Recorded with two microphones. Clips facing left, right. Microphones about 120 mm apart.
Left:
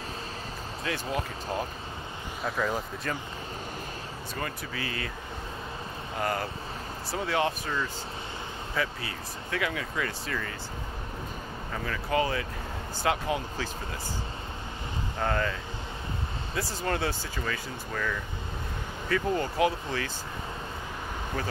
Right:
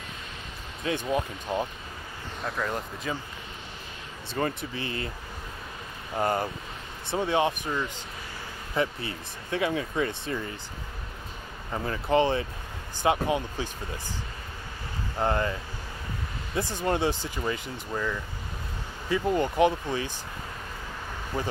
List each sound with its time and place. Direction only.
0.8 s speech: 20° right (ahead or behind)
2.4 s speech: centre (ahead or behind)
4.4 s speech: 30° right (ahead or behind)
6.1 s speech: 25° right (ahead or behind)
11.7 s speech: 30° right (ahead or behind)
15.1 s speech: 25° right (ahead or behind)
16.5 s speech: 20° right (ahead or behind)